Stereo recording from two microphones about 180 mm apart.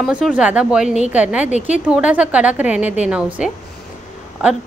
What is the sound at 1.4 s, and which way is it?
Speech, 40° left (ahead or behind).